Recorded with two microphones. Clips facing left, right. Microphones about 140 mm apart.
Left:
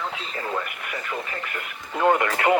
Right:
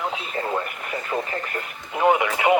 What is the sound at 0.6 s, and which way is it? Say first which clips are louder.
Speech: right 3 dB; 35° right (ahead or behind).